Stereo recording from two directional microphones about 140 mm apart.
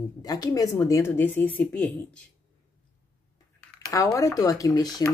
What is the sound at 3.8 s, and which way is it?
Speech, 25° left (ahead or behind).